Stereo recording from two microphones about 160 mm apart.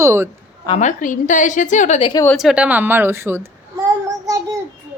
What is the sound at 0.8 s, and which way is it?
A woman's voice, 55° left (ahead or behind).